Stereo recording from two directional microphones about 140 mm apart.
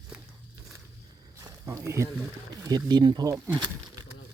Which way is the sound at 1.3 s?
20° right (ahead or behind).